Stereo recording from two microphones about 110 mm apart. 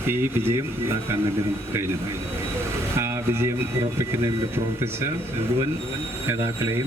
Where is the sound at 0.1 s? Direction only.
20° right (ahead or behind).